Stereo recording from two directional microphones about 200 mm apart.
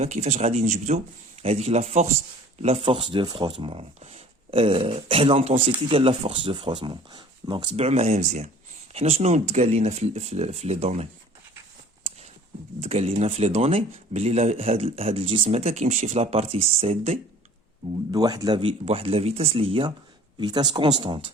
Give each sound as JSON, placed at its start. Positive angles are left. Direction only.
{"t": 0.0, "sound": "speech", "side_deg": -35}
{"t": 12.8, "sound": "speech", "side_deg": -35}
{"t": 18.1, "sound": "speech", "side_deg": -20}